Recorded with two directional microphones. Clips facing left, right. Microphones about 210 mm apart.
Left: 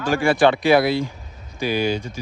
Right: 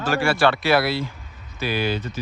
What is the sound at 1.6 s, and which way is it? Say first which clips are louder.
Speech: left 3 dB; 50° left (ahead or behind).